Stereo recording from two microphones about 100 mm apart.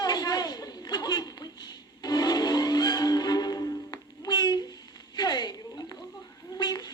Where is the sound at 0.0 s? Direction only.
40° left (ahead or behind).